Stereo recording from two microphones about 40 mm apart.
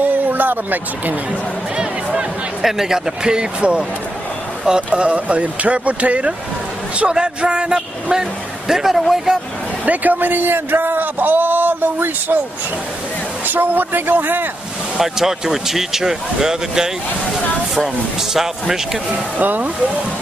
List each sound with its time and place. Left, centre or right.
0.3 s speech: right
2.6 s a man's voice: centre; by 6.3 s right
7.0 s a man's voice: right
9.8 s a man's voice: right
13.5 s speech: right
15.0 s a man's voice: centre
19.0 s speech: right